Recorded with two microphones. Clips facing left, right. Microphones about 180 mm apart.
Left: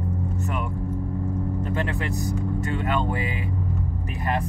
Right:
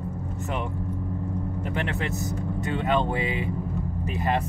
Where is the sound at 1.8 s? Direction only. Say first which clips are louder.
Left 1 dB; 20° right (ahead or behind).